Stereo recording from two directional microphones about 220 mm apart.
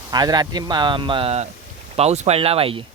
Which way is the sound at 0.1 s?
20° right (ahead or behind).